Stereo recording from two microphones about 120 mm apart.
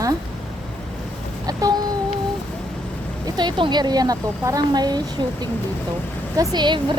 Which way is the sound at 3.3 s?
40° right (ahead or behind).